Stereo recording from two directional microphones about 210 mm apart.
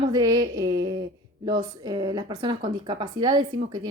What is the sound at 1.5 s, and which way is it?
Speech, 20° right (ahead or behind).